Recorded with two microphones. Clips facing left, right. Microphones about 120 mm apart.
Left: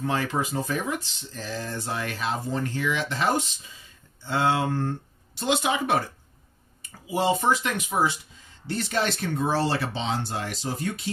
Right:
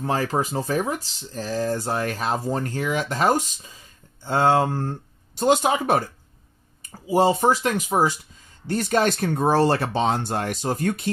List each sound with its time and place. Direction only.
0.0 s speech: 40° right (ahead or behind)